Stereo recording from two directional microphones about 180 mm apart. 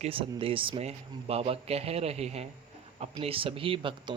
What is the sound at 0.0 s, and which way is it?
Speech, 30° right (ahead or behind).